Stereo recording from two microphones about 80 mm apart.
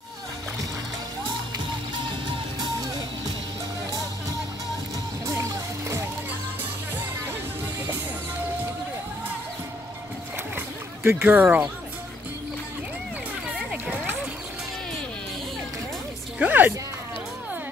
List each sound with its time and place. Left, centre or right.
2.0 s music: right
5.2 s music: right
10.5 s splash: right
11.2 s speech: centre
13.7 s music: centre
16.3 s a sound: right